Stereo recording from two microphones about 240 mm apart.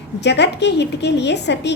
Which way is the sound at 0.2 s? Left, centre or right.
Left.